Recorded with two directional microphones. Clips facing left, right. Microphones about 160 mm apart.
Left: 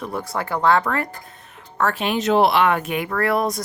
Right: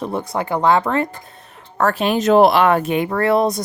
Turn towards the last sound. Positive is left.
turn(degrees=-25)  # may be behind; listen again after turning